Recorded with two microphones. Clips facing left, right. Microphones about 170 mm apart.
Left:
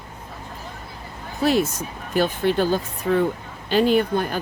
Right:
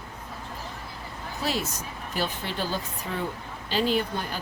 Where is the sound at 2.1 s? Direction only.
55° left (ahead or behind).